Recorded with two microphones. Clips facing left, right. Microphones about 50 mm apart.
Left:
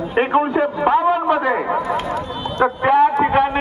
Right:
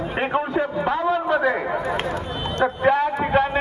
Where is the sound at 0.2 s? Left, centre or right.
Left.